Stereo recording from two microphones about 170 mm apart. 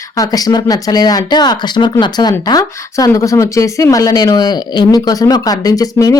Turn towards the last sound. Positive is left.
turn(degrees=20)  # may be behind; listen again after turning